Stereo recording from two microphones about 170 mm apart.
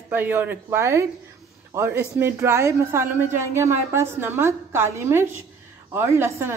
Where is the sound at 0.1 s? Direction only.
10° right (ahead or behind).